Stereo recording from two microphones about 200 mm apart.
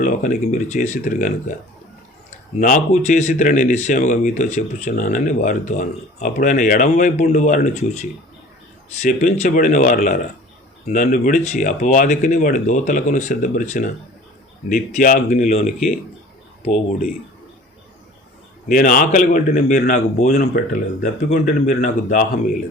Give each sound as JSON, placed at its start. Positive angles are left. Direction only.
{"t": 0.0, "sound": "speech", "side_deg": 40}
{"t": 2.6, "sound": "speech", "side_deg": 40}
{"t": 18.7, "sound": "speech", "side_deg": 40}